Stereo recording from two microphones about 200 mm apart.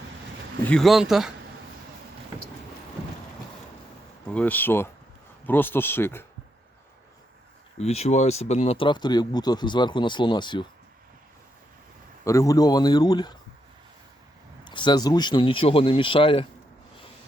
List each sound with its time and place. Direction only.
0.7 s speech: centre (ahead or behind)
4.4 s speech: 10° left (ahead or behind)
7.8 s speech: 30° left (ahead or behind)
12.2 s speech: 15° left (ahead or behind)
14.6 s speech: 25° left (ahead or behind)